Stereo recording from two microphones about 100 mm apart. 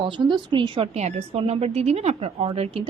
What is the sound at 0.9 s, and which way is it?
A woman's voice, 80° right.